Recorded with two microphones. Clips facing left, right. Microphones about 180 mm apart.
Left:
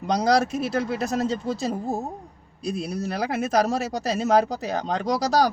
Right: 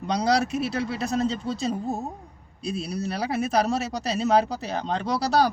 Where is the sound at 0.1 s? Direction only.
45° left (ahead or behind).